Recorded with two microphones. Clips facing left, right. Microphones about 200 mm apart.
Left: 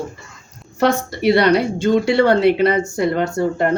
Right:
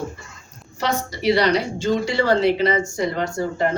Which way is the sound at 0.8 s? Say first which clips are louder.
Left 7 dB; 55° left (ahead or behind).